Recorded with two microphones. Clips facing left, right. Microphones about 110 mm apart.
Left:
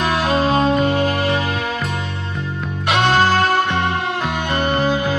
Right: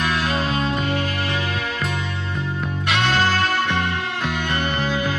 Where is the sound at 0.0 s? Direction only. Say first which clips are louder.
Left 5 dB; 25° left (ahead or behind).